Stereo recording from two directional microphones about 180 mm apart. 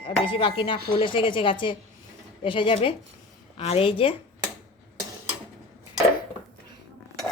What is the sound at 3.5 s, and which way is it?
Speech, 35° left (ahead or behind).